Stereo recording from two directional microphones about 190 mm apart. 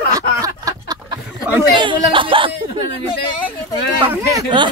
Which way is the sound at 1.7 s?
25° right (ahead or behind).